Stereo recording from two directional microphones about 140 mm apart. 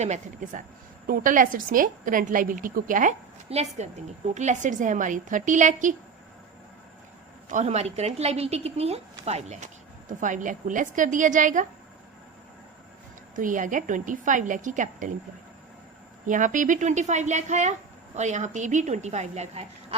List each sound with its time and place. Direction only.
0.0 s a woman's voice: 55° right (ahead or behind)
1.0 s a woman's voice: 75° right (ahead or behind); by 5.9 s 60° right (ahead or behind)
7.5 s a woman's voice: 50° right (ahead or behind)
13.3 s a woman's voice: 70° right (ahead or behind)
16.2 s a woman's voice: 65° right (ahead or behind)